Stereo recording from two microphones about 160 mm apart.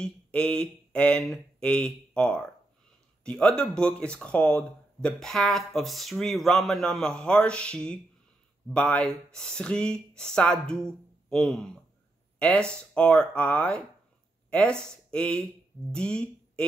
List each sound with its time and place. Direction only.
0.0 s speech: 5° left (ahead or behind)